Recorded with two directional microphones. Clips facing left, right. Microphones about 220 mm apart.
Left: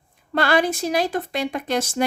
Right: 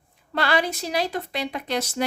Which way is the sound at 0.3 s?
50° left (ahead or behind).